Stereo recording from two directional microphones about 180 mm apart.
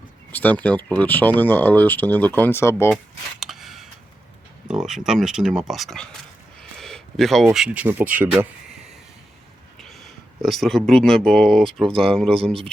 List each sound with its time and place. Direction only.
0.3 s speech: 10° left (ahead or behind)
3.4 s a sound: centre (ahead or behind)
4.7 s speech: 5° right (ahead or behind)
6.6 s a sound: 5° left (ahead or behind)
7.5 s speech: 5° right (ahead or behind)
9.8 s speech: centre (ahead or behind)
11.9 s speech: 30° right (ahead or behind)